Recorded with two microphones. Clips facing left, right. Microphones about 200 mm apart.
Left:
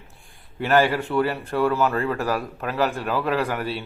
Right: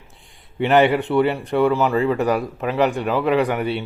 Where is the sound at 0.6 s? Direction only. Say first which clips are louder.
Right 4 dB; 20° right (ahead or behind).